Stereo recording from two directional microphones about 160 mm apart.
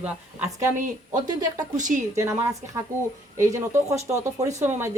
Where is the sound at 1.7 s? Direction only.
50° right (ahead or behind).